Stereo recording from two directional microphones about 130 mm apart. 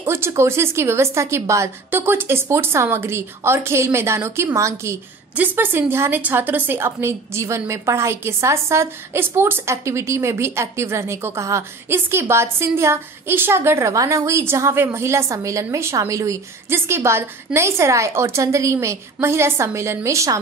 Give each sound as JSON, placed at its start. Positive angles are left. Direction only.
{"t": 0.0, "sound": "a woman's voice", "side_deg": -20}